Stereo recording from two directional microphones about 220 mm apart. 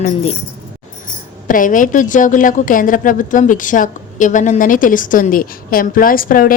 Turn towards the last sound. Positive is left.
turn(degrees=40)  # may be behind; listen again after turning